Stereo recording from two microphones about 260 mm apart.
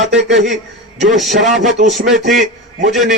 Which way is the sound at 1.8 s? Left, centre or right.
Right.